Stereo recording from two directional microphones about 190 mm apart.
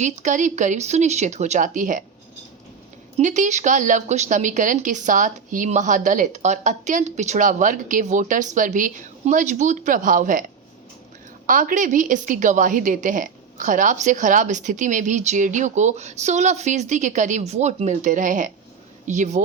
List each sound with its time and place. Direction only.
0.0 s a woman's voice: 40° right (ahead or behind)
3.2 s a woman's voice: 40° right (ahead or behind)
11.4 s a woman's voice: 45° right (ahead or behind)